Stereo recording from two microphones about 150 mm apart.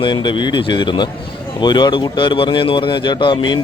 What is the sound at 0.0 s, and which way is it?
Speech, 30° left (ahead or behind).